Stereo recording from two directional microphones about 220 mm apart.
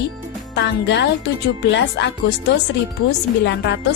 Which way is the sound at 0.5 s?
50° left (ahead or behind).